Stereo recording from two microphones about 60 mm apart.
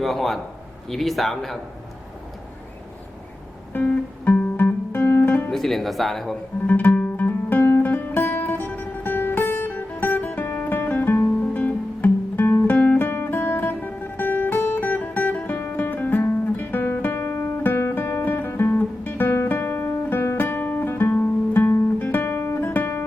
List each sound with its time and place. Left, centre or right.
0.0 s speech: centre
3.7 s music: left
4.3 s guitar: left
5.5 s speech: centre
6.7 s music: left
10.9 s guitar: left
12.6 s music: left
21.9 s guitar: left